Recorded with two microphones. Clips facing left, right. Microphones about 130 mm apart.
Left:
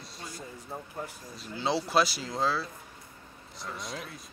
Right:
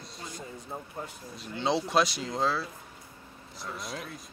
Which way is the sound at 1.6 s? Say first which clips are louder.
Right 1 dB; centre (ahead or behind).